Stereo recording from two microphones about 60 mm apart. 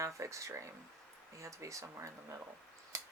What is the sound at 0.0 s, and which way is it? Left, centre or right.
Speech, right.